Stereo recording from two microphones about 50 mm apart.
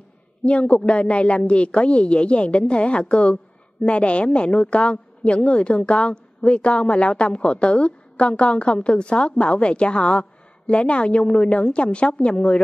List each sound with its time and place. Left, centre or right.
0.5 s a woman's voice: left